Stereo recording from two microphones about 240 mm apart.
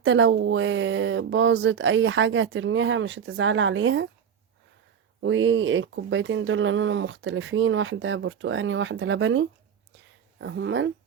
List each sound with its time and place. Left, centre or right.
0.0 s speech: right
5.2 s speech: right